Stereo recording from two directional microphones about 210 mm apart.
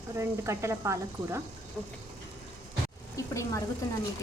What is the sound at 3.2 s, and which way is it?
Vehicle, 15° left (ahead or behind).